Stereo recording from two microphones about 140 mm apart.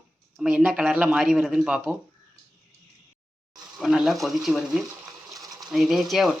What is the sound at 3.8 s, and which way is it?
Speech, centre (ahead or behind).